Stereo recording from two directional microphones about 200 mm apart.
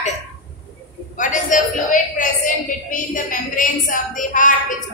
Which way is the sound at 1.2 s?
40° left (ahead or behind).